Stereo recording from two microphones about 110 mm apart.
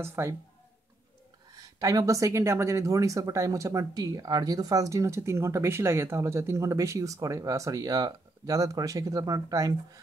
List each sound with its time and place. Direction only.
0.0 s speech: 25° right (ahead or behind)
1.8 s speech: 30° right (ahead or behind)